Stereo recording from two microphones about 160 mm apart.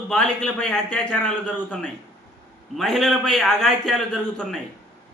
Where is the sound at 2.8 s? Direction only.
Centre (ahead or behind).